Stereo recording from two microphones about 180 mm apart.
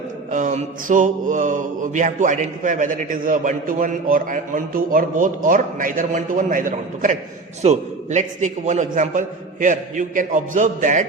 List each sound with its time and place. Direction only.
0.3 s mantra: 45° right (ahead or behind)